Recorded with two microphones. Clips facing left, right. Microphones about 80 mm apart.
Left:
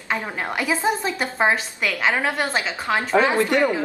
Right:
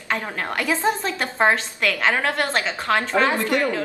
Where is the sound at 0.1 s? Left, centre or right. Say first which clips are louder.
Even; centre.